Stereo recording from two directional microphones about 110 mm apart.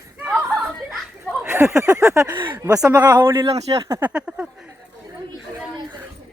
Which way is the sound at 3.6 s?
70° right (ahead or behind).